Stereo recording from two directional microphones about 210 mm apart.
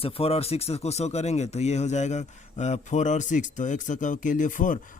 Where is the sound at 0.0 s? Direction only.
30° left (ahead or behind).